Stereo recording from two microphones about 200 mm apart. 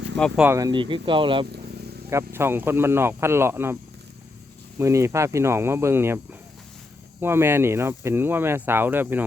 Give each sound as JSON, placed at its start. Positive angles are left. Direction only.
{"t": 0.2, "sound": "speech", "side_deg": -5}
{"t": 2.0, "sound": "speech", "side_deg": -15}
{"t": 4.8, "sound": "speech", "side_deg": -15}
{"t": 7.2, "sound": "speech", "side_deg": -10}